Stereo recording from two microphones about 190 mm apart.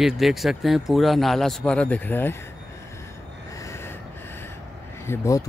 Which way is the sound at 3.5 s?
15° left (ahead or behind).